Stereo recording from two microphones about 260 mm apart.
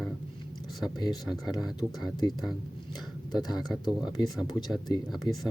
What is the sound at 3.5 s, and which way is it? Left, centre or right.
Speech, centre.